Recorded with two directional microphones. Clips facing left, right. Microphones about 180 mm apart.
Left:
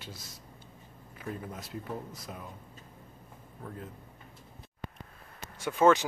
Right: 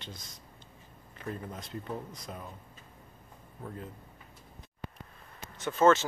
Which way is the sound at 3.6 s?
5° right (ahead or behind).